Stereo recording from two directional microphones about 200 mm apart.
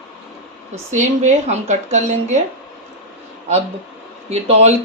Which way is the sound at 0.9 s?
35° right (ahead or behind).